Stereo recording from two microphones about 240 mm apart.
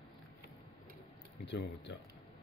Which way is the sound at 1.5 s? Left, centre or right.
Left.